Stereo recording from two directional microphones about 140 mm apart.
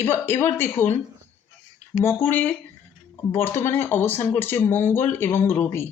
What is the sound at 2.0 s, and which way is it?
Speech, 15° left (ahead or behind).